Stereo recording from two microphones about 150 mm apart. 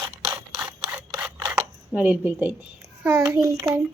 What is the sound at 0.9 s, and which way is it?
Camera, 10° right (ahead or behind).